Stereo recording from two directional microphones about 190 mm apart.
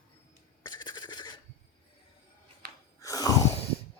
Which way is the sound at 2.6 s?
60° right (ahead or behind).